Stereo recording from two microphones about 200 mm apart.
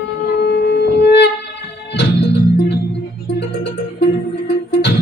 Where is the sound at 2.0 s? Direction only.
60° left (ahead or behind).